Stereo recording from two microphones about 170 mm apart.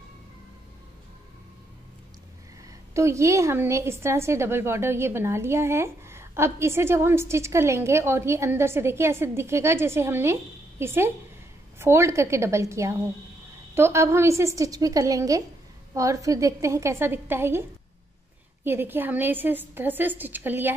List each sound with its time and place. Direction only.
2.9 s a woman's voice: 15° right (ahead or behind)